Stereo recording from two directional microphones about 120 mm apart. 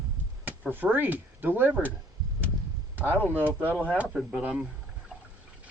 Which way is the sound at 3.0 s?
15° left (ahead or behind).